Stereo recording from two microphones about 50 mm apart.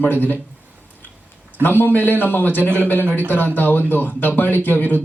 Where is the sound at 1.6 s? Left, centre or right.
Left.